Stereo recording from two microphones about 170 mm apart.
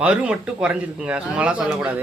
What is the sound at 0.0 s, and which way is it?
A man's voice, 5° right (ahead or behind).